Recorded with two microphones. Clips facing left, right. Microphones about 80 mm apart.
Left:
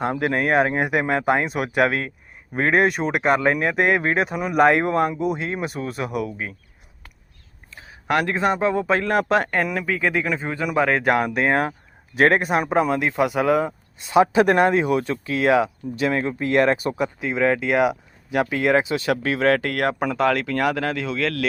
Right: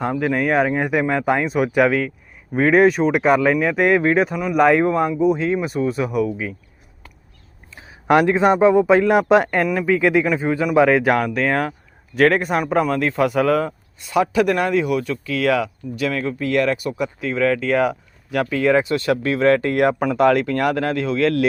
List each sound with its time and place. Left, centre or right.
0.1 s speech: centre
7.8 s speech: centre
11.2 s speech: left
20.0 s speech: centre